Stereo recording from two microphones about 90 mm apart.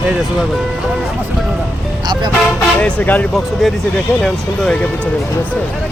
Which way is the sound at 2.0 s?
60° right (ahead or behind).